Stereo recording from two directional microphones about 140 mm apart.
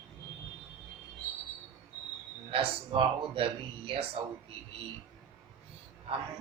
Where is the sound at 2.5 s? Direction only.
40° right (ahead or behind).